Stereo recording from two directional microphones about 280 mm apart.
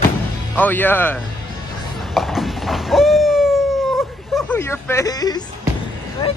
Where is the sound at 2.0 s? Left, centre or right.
Centre.